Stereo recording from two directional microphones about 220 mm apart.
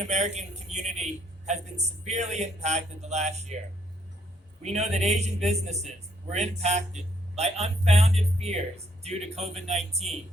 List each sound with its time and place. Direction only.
0.0 s a man's voice: 30° right (ahead or behind)
4.6 s a man's voice: 30° right (ahead or behind)